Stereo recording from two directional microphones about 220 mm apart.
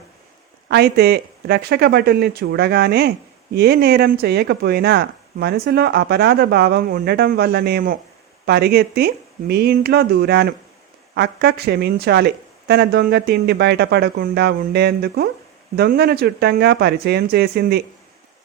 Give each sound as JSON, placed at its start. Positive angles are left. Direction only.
{"t": 0.7, "sound": "speech", "side_deg": -45}